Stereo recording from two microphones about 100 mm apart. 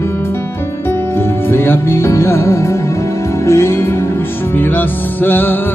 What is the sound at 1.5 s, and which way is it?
Music, 20° left (ahead or behind).